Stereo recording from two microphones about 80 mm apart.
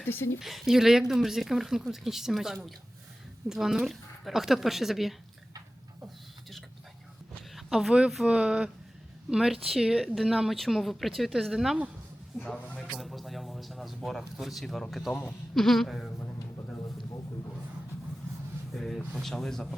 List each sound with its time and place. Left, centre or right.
0.0 s speech: left
0.3 s speech: centre
7.5 s speech: centre
12.9 s speech: centre
18.7 s a sound: centre
19.2 s speech: centre